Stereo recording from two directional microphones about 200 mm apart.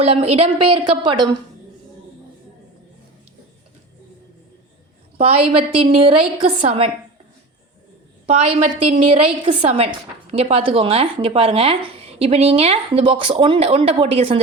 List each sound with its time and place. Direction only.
0.0 s speech: 30° right (ahead or behind)
5.1 s speech: 30° right (ahead or behind)
8.3 s speech: 30° right (ahead or behind)